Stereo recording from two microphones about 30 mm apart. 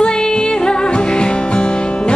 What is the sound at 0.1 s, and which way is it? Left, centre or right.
Music, left.